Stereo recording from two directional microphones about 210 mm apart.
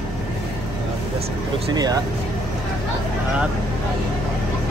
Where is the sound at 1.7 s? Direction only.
20° right (ahead or behind).